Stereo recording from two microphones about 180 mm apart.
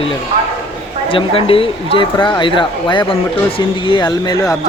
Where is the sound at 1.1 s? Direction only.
30° left (ahead or behind).